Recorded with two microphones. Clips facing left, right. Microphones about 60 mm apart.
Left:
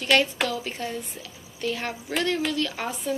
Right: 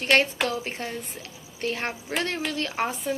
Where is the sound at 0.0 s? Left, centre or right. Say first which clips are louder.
Even; right.